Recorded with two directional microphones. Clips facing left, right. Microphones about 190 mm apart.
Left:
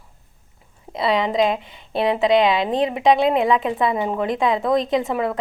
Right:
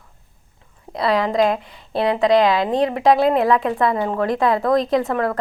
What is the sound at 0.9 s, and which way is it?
A woman's voice, centre (ahead or behind).